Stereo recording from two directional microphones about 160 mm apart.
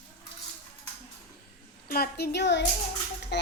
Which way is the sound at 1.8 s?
70° left (ahead or behind).